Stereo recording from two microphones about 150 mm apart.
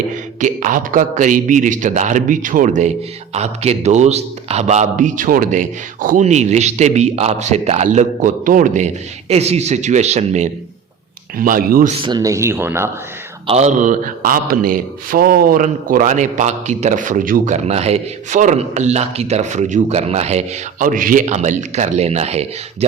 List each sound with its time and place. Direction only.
0.3 s a man's voice: 55° right (ahead or behind)
3.3 s a man's voice: 45° right (ahead or behind)
9.3 s a man's voice: 45° right (ahead or behind)
11.3 s a man's voice: 70° right (ahead or behind)
12.0 s speech: 25° right (ahead or behind)
13.5 s a man's voice: 50° right (ahead or behind)